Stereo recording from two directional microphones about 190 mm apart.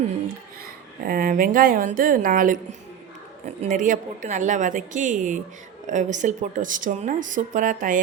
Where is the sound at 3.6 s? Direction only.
40° right (ahead or behind).